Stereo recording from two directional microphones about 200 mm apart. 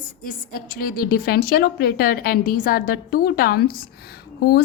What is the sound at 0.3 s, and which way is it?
A woman's voice, 45° left (ahead or behind).